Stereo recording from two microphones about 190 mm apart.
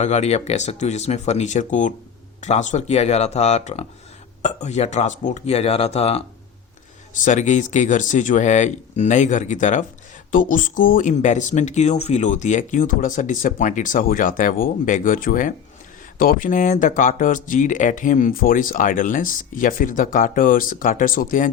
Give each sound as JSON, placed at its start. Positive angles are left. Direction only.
{"t": 0.0, "sound": "speech", "side_deg": 35}
{"t": 7.3, "sound": "speech", "side_deg": 40}